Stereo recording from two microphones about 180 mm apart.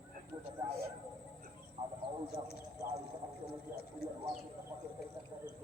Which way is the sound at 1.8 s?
35° right (ahead or behind).